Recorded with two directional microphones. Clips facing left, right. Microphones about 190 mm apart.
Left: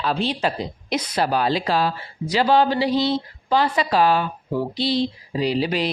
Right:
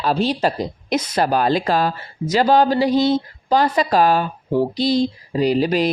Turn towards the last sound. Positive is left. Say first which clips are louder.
# right 5 dB
turn(degrees=-45)  # may be behind; listen again after turning